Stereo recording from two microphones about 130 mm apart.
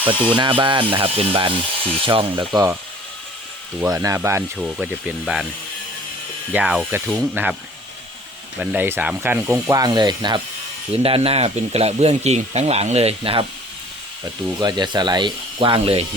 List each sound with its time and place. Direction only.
0.0 s speech: 40° right (ahead or behind)
3.8 s speech: 25° right (ahead or behind)
4.5 s speech: 5° right (ahead or behind)
6.5 s ratchet: 10° right (ahead or behind)
8.5 s speech: 15° right (ahead or behind); by 10.4 s 35° right (ahead or behind)
10.9 s speech: 45° right (ahead or behind)
14.6 s speech: 35° right (ahead or behind)